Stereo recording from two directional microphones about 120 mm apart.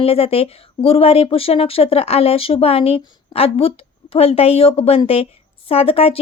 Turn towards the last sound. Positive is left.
turn(degrees=55)  # may be behind; listen again after turning